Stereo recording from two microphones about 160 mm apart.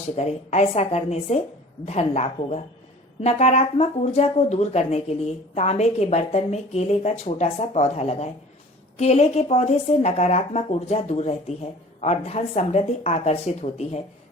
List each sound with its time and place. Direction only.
0.2 s a woman's voice: 40° left (ahead or behind)